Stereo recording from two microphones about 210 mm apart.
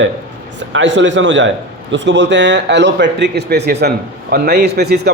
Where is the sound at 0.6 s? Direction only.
60° right (ahead or behind).